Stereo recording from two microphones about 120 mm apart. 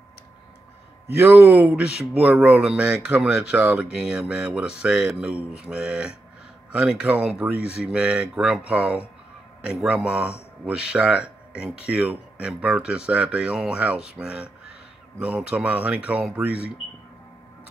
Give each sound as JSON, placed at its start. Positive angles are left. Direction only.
{"t": 1.1, "sound": "speech", "side_deg": -15}